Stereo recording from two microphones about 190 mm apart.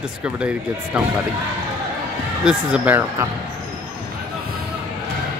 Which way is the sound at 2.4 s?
5° right (ahead or behind).